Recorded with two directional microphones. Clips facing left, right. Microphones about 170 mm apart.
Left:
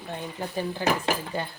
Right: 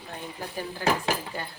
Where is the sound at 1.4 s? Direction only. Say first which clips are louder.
Left 5 dB; 25° left (ahead or behind).